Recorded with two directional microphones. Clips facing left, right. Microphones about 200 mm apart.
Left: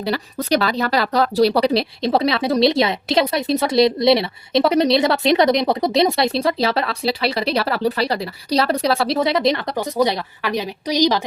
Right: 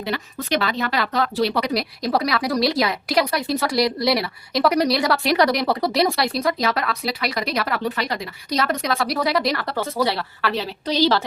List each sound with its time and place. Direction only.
0.0 s speech: 35° left (ahead or behind); by 11.2 s 15° left (ahead or behind)